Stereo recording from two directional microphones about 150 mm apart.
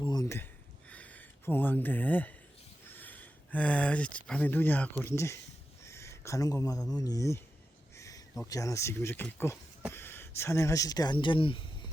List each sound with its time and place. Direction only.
0.0 s speech: 25° left (ahead or behind)
0.9 s gasp: 10° left (ahead or behind)
2.9 s speech: 10° left (ahead or behind)
5.8 s a sound: 20° left (ahead or behind)
6.9 s speech: 25° left (ahead or behind)
7.9 s a sound: 20° left (ahead or behind)
8.4 s speech: 20° left (ahead or behind)